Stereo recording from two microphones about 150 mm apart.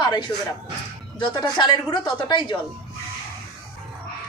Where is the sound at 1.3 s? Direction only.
30° left (ahead or behind).